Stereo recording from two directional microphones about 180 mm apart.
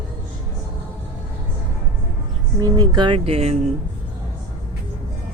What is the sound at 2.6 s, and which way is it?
Speech, 20° right (ahead or behind).